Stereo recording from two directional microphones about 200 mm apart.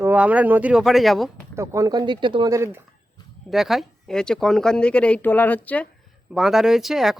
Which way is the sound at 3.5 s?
Centre (ahead or behind).